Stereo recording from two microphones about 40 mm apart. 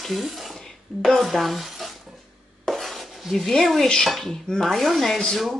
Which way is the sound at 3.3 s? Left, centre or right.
Centre.